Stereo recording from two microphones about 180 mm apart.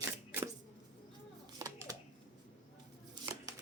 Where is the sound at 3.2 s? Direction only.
25° right (ahead or behind).